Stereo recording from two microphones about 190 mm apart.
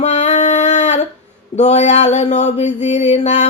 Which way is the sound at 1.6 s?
35° left (ahead or behind).